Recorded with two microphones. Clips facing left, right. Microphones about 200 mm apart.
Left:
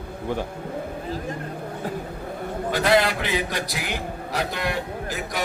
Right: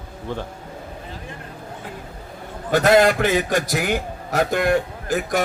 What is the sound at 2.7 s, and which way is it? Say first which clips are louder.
A man's voice: right 6 dB; 45° right (ahead or behind).